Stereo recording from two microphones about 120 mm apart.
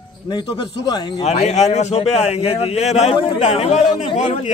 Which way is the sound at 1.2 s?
70° left (ahead or behind).